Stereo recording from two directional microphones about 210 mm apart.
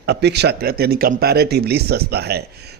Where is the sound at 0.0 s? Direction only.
50° right (ahead or behind).